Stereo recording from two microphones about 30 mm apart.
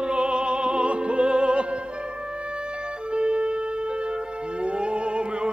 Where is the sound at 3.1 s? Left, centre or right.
Right.